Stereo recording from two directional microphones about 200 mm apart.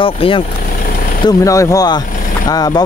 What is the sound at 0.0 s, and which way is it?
Speech, 25° left (ahead or behind).